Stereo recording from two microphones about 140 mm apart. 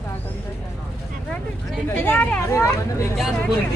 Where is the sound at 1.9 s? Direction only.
15° left (ahead or behind).